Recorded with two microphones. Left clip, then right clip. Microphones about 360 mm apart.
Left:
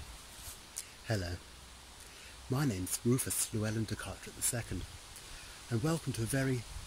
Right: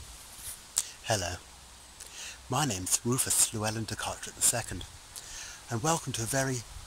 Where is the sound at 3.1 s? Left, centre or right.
Centre.